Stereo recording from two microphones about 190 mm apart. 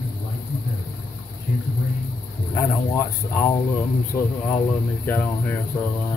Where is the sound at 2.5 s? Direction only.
15° left (ahead or behind).